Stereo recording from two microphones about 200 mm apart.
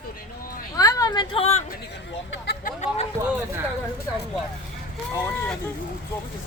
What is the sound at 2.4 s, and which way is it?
Hubbub, 55° left (ahead or behind).